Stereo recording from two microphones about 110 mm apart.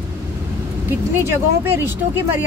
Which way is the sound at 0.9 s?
25° right (ahead or behind).